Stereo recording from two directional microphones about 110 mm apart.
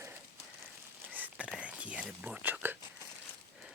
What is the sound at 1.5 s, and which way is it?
Whispering, 10° right (ahead or behind).